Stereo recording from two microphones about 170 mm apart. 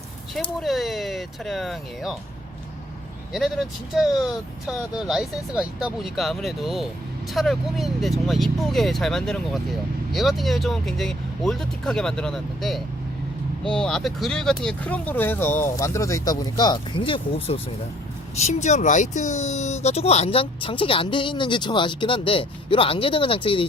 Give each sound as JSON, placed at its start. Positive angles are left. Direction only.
{"t": 0.6, "sound": "speech", "side_deg": 0}
{"t": 3.3, "sound": "speech", "side_deg": 0}